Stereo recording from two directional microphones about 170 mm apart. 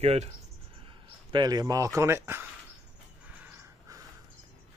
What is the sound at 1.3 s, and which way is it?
Speech, 25° right (ahead or behind).